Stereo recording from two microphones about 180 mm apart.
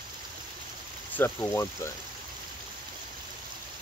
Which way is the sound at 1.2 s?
15° left (ahead or behind).